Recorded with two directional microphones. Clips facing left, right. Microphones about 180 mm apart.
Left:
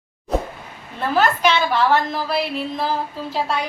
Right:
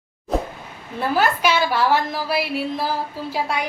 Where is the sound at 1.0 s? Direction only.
10° right (ahead or behind).